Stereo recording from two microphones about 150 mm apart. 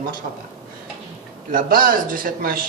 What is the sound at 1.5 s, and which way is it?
A man's voice, 65° right (ahead or behind).